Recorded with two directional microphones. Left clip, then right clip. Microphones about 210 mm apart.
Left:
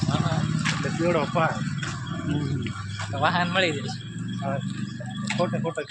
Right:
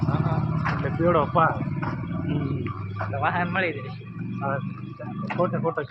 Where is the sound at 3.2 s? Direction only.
90° left.